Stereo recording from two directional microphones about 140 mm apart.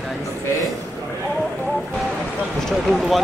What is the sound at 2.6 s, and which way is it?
Speech, centre (ahead or behind).